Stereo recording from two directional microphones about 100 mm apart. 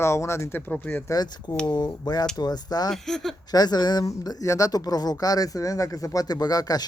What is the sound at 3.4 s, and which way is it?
Speech, 40° left (ahead or behind).